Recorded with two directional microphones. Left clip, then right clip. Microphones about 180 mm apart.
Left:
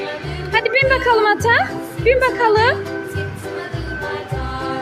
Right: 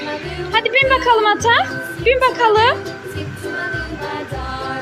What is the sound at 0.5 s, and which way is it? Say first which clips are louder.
A woman's voice: right 1 dB; 20° left (ahead or behind).